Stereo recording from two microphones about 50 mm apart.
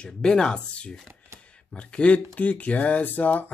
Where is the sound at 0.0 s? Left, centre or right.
Centre.